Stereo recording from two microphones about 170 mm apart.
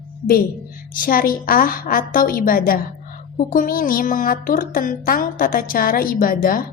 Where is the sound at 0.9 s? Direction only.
55° left (ahead or behind).